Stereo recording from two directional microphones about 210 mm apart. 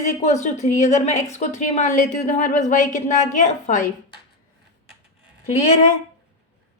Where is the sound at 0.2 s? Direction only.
35° left (ahead or behind).